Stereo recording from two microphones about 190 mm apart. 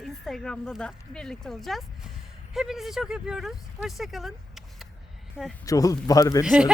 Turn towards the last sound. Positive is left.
turn(degrees=-5)  # may be behind; listen again after turning